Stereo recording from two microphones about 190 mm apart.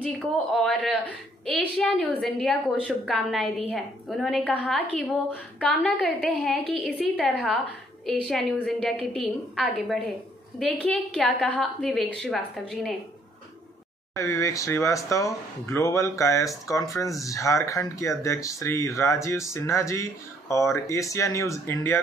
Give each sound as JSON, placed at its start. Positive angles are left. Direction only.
{"t": 0.0, "sound": "a woman's voice", "side_deg": 0}
{"t": 14.1, "sound": "speech", "side_deg": 15}